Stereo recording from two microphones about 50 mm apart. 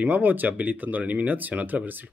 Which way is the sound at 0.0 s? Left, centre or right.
Right.